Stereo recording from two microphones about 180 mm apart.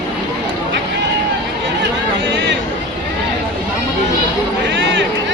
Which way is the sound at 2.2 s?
80° right.